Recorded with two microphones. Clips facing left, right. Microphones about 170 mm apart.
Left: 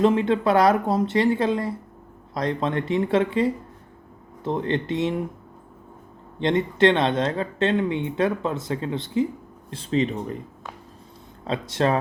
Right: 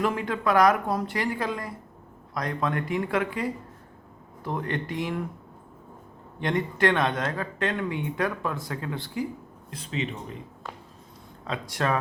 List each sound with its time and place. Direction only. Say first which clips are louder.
0.0 s speech: left 7 dB; 25° left (ahead or behind)
6.4 s speech: left 6 dB; 25° left (ahead or behind); by 10.3 s 40° left (ahead or behind)
11.4 s speech: left 5 dB; 30° left (ahead or behind)